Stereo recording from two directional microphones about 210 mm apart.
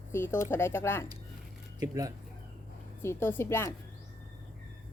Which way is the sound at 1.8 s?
15° right (ahead or behind).